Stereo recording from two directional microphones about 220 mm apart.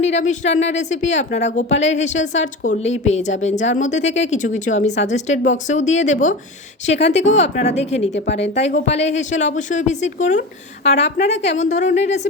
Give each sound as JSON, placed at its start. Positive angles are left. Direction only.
{"t": 0.0, "sound": "a woman's voice", "side_deg": 30}
{"t": 8.1, "sound": "speech", "side_deg": 55}
{"t": 8.5, "sound": "a woman's voice", "side_deg": 30}